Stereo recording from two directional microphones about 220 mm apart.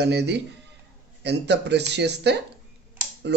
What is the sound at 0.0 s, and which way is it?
Speech, 50° right (ahead or behind).